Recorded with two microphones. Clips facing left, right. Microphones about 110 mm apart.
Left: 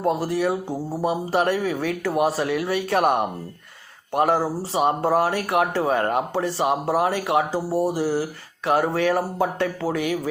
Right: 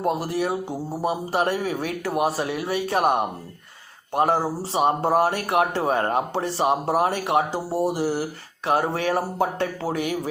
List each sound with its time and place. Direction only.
0.2 s speech: 45° right (ahead or behind)
1.4 s speech: 25° right (ahead or behind)
4.4 s speech: 25° right (ahead or behind)